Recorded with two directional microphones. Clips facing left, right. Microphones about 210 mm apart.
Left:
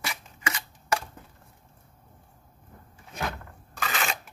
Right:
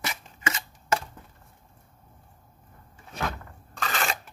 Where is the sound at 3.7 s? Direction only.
5° left (ahead or behind).